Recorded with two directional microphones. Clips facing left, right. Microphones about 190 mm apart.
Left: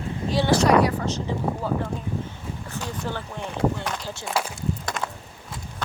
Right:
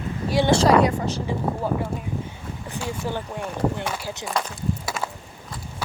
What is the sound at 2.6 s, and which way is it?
Speech, 10° right (ahead or behind).